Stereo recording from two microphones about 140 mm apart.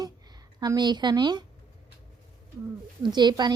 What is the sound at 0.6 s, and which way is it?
Speech, 30° right (ahead or behind).